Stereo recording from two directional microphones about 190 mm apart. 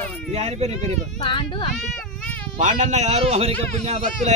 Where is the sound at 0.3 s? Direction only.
35° right (ahead or behind).